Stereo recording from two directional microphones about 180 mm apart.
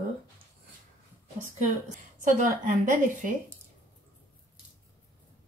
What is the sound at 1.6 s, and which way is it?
A woman's voice, 40° right (ahead or behind).